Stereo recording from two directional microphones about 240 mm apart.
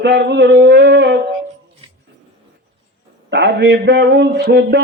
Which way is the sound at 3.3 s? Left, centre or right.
Right.